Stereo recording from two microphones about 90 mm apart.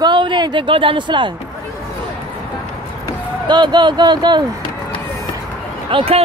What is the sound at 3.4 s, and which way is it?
Speech, 55° right (ahead or behind).